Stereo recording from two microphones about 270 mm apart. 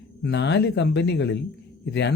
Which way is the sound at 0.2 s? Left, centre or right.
Left.